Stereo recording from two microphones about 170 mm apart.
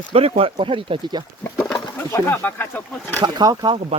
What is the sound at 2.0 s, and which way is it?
Speech, 15° left (ahead or behind).